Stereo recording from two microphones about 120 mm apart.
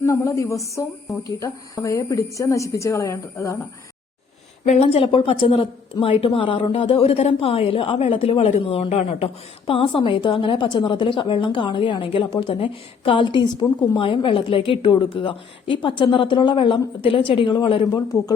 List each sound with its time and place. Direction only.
0.0 s a woman's voice: 25° left (ahead or behind)
4.6 s a woman's voice: 65° left (ahead or behind); by 18.0 s 45° left (ahead or behind)